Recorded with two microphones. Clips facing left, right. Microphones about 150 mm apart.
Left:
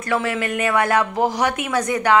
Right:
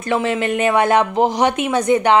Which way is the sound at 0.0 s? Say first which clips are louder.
Right 3 dB; 20° right (ahead or behind).